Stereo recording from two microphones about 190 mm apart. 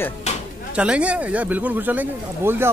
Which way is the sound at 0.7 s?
5° right (ahead or behind).